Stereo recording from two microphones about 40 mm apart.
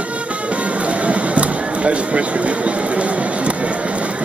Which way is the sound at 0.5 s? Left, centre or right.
Right.